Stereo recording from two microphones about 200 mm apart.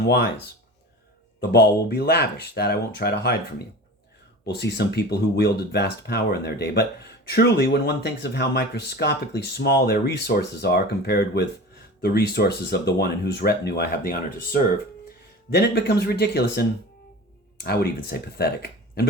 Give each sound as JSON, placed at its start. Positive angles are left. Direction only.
{"t": 0.0, "sound": "speech", "side_deg": 50}
{"t": 1.5, "sound": "speech", "side_deg": 55}
{"t": 4.4, "sound": "speech", "side_deg": 55}
{"t": 15.5, "sound": "speech", "side_deg": 55}